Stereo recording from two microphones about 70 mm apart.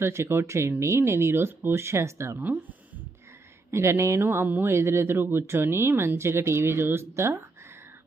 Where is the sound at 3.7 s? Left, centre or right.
Right.